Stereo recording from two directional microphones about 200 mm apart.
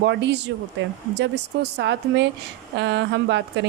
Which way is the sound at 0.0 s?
60° right (ahead or behind).